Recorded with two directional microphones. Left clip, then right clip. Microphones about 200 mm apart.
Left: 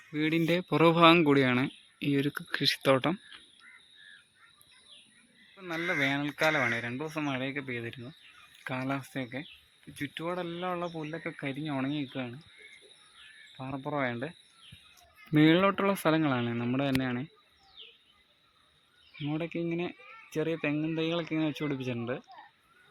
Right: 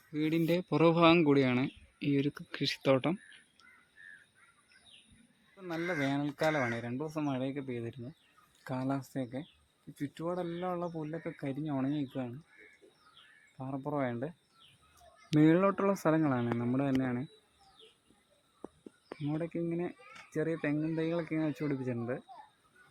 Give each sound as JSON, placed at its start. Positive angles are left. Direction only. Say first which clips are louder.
{"t": 0.1, "sound": "speech", "louder": "left 3 dB", "side_deg": 10}
{"t": 6.0, "sound": "speech", "louder": "left 5 dB", "side_deg": 0}
{"t": 10.9, "sound": "speech", "louder": "left 2 dB", "side_deg": 15}
{"t": 13.6, "sound": "speech", "louder": "left 3 dB", "side_deg": 20}
{"t": 19.2, "sound": "speech", "louder": "left 2 dB", "side_deg": 25}